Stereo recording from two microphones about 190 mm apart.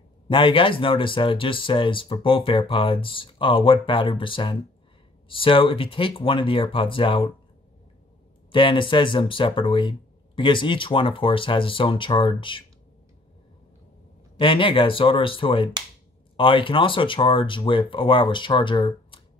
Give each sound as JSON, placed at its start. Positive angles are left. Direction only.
{"t": 0.3, "sound": "speech", "side_deg": 25}
{"t": 8.5, "sound": "speech", "side_deg": 25}
{"t": 14.4, "sound": "speech", "side_deg": 25}